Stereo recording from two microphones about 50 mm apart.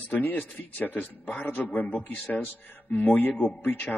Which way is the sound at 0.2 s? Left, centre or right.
Left.